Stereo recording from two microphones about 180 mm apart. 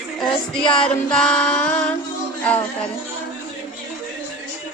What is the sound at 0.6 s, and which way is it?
Music, 30° left (ahead or behind).